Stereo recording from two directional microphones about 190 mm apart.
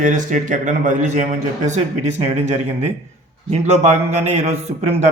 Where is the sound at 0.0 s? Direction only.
40° right (ahead or behind).